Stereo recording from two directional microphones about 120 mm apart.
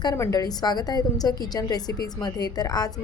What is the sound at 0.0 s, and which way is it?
A woman's voice, 30° left (ahead or behind).